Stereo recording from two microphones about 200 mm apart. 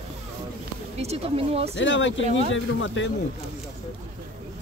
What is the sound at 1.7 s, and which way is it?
Speech, 70° left (ahead or behind).